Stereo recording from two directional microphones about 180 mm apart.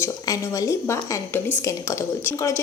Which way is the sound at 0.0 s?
20° left (ahead or behind).